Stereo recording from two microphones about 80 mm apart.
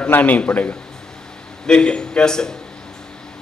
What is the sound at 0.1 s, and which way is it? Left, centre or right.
A man's voice, left.